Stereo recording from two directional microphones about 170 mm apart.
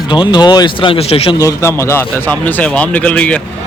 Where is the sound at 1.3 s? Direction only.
15° left (ahead or behind).